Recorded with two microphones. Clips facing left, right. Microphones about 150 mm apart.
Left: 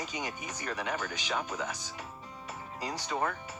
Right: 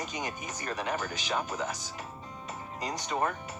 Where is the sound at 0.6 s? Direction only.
15° right (ahead or behind).